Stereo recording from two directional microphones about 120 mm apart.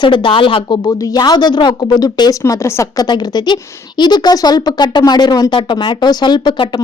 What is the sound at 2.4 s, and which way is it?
A woman's voice, 20° left (ahead or behind).